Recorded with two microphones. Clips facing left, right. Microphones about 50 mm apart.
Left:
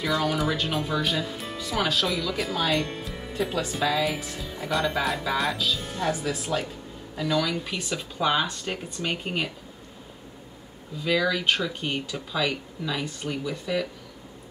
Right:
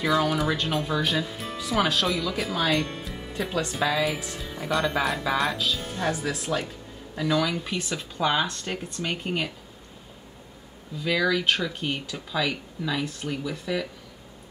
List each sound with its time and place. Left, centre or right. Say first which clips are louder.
0.0 s speech: right 2 dB; centre
11.0 s speech: even; centre